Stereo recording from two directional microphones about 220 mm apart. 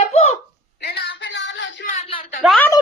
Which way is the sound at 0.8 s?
45° left (ahead or behind).